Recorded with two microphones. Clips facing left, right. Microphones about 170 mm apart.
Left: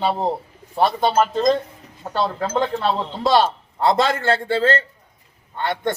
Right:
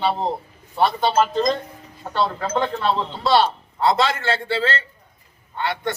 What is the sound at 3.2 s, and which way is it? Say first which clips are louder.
A man's voice: left 2 dB; 45° left (ahead or behind).